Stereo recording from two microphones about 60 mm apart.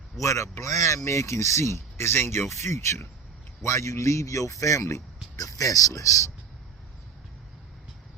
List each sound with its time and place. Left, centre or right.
0.2 s a man's voice: left
5.4 s speech: left